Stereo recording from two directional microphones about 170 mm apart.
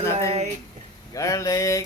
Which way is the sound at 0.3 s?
40° right (ahead or behind).